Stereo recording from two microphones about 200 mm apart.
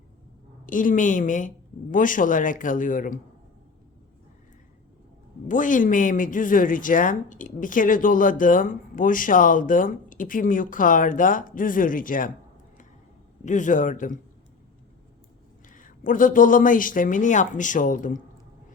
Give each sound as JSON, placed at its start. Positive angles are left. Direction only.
{"t": 0.6, "sound": "speech", "side_deg": 40}
{"t": 5.5, "sound": "speech", "side_deg": 40}
{"t": 13.4, "sound": "speech", "side_deg": 40}
{"t": 15.7, "sound": "speech", "side_deg": 40}